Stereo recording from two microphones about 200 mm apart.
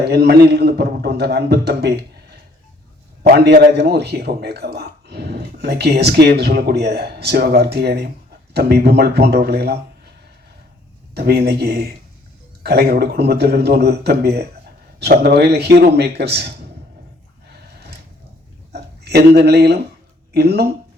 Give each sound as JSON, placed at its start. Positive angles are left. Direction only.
{"t": 0.0, "sound": "a man's voice", "side_deg": -55}
{"t": 11.1, "sound": "a man's voice", "side_deg": -55}
{"t": 18.7, "sound": "a sound", "side_deg": -55}
{"t": 20.3, "sound": "a man's voice", "side_deg": -55}